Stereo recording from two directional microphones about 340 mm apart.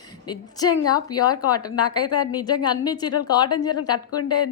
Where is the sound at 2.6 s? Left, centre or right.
Centre.